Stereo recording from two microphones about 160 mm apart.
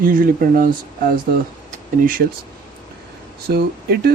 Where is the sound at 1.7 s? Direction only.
60° right (ahead or behind).